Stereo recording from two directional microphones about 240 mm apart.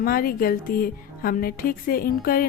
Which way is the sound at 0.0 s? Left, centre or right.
Left.